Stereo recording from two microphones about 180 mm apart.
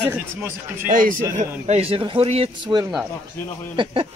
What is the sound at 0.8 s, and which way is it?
Speech, 50° right (ahead or behind).